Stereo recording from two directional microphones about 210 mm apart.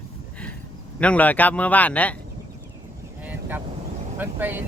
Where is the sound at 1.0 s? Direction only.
5° left (ahead or behind).